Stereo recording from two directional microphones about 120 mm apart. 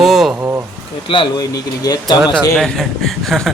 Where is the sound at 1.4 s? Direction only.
35° left (ahead or behind).